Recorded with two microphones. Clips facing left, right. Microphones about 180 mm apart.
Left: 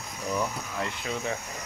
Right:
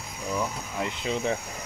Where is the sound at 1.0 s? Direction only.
30° right (ahead or behind).